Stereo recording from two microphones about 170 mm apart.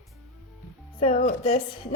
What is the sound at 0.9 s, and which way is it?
Speech, 30° left (ahead or behind).